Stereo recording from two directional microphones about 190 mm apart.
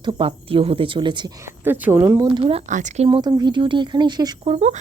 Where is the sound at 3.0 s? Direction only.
20° right (ahead or behind).